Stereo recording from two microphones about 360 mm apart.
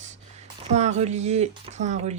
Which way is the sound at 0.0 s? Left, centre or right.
Centre.